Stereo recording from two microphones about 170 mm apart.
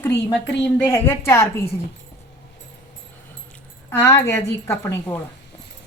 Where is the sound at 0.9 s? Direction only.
15° left (ahead or behind).